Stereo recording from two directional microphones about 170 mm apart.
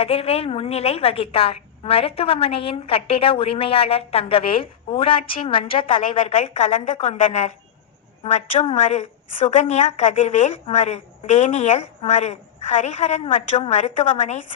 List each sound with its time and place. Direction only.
0.0 s a woman's voice: 35° left (ahead or behind)
6.2 s a woman's voice: 45° left (ahead or behind)